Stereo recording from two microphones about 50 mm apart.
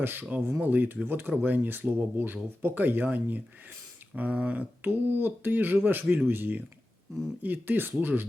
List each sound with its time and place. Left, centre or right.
0.0 s speech: right
4.8 s speech: right